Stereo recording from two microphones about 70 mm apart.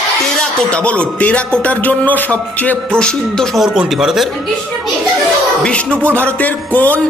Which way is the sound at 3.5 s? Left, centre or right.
Centre.